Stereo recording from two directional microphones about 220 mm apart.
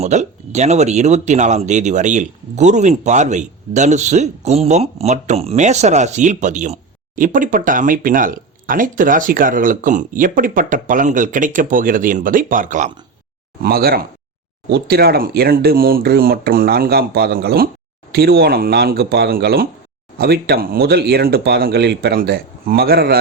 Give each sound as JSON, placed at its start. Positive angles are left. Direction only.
{"t": 0.0, "sound": "speech", "side_deg": -30}